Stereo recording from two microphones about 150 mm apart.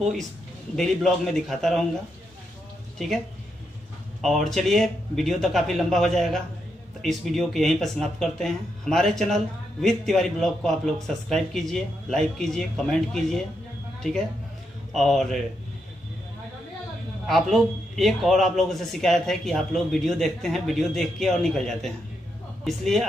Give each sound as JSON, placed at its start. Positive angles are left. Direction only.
{"t": 0.7, "sound": "speech", "side_deg": 0}
{"t": 4.2, "sound": "speech", "side_deg": 0}
{"t": 15.0, "sound": "speech", "side_deg": 0}
{"t": 17.3, "sound": "speech", "side_deg": 0}